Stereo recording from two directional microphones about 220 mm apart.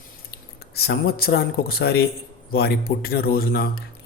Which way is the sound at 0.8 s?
45° left (ahead or behind).